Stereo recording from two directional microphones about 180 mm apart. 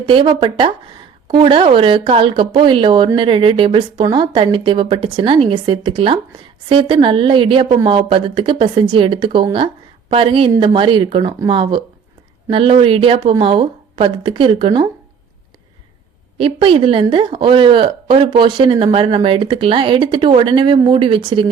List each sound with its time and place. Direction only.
0.0 s a woman's voice: 25° right (ahead or behind)
16.4 s a woman's voice: 30° right (ahead or behind)